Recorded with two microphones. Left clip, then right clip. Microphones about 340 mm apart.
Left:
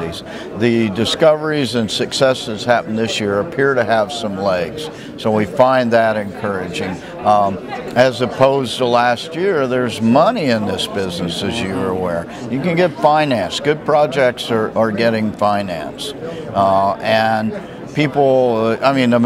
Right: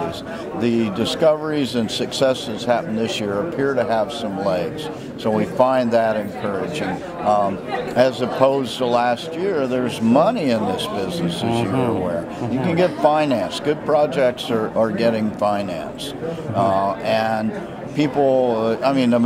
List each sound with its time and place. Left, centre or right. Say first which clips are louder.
0.6 s speech: left 5 dB; left